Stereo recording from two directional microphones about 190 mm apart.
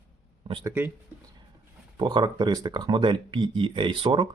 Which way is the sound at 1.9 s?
25° right (ahead or behind).